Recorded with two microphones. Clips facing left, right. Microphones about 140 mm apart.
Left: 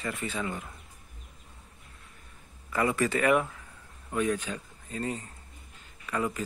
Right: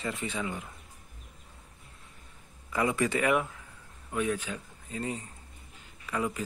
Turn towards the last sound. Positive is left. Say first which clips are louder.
# left 1 dB
turn(degrees=-10)  # may be behind; listen again after turning